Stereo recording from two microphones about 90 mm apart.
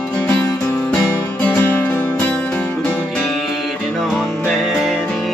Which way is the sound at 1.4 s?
20° left (ahead or behind).